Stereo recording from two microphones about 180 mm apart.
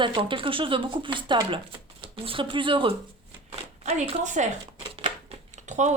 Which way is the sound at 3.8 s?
35° right (ahead or behind).